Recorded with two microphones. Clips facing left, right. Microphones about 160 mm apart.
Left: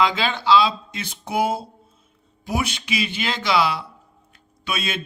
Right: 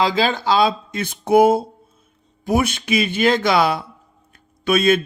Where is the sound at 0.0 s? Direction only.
35° right (ahead or behind).